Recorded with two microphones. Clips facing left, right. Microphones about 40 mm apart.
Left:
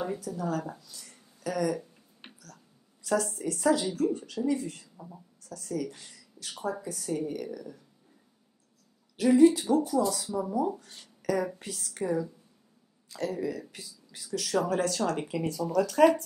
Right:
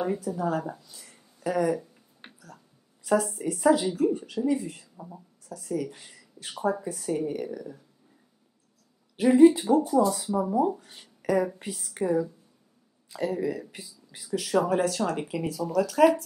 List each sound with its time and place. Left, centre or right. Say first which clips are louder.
0.0 s speech: right 5 dB; right
9.1 s speech: right 3 dB; centre